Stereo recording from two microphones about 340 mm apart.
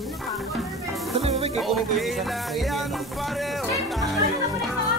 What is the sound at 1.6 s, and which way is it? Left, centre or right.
Music, centre.